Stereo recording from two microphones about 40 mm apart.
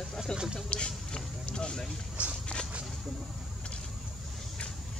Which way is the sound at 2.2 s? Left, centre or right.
Right.